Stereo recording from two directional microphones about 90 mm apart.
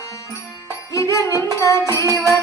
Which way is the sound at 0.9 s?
35° left (ahead or behind).